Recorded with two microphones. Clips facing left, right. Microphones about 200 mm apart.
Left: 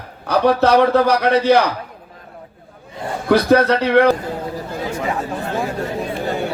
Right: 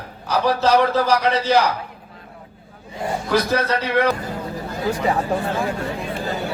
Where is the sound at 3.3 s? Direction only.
60° left (ahead or behind).